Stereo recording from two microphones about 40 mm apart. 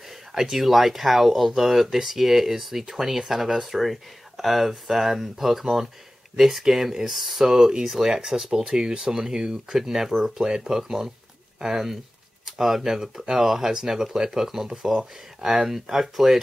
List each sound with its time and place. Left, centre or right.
0.3 s speech: centre